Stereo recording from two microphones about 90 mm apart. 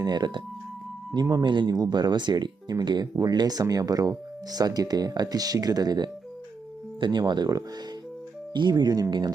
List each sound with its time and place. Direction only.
0.0 s speech: 50° right (ahead or behind)
1.5 s speech: 60° right (ahead or behind)
1.7 s speech: 50° right (ahead or behind)